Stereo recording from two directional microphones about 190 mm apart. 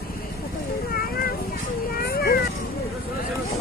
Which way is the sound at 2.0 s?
55° left (ahead or behind).